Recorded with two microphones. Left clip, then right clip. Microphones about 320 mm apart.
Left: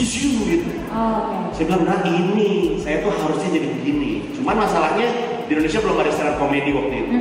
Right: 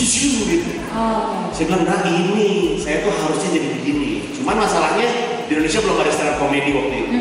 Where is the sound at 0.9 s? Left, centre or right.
Centre.